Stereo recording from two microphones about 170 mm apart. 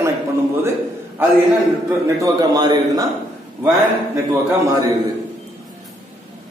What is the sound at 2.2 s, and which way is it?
Speech, 20° right (ahead or behind).